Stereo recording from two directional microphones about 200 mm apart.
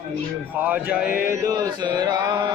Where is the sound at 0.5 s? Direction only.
10° right (ahead or behind).